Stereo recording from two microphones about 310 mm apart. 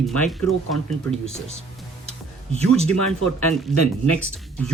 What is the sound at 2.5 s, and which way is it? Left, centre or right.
Speech, centre.